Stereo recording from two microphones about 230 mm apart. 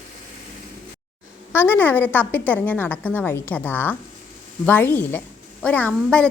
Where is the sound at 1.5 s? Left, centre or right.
Centre.